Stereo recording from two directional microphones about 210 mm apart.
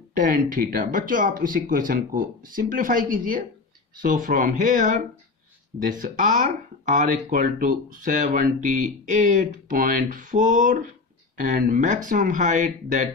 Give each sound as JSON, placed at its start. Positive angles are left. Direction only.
{"t": 0.1, "sound": "speech", "side_deg": -40}